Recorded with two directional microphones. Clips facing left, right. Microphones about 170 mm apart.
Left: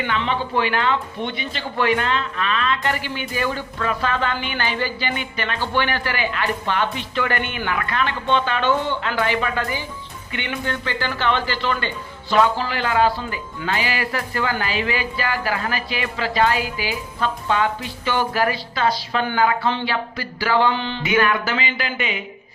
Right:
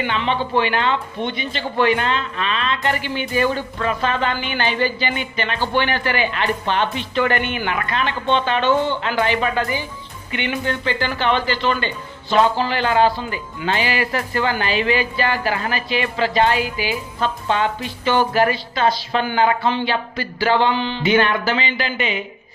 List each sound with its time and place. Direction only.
0.1 s speech: 25° right (ahead or behind)
21.0 s speech: 30° right (ahead or behind)